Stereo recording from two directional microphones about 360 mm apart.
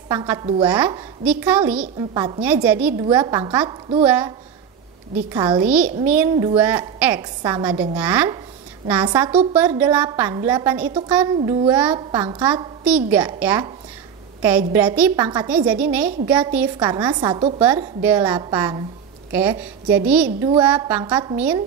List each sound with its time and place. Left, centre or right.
0.1 s a woman's voice: centre
5.3 s a woman's voice: centre
14.7 s a woman's voice: centre
20.2 s a woman's voice: centre
20.6 s a woman's voice: centre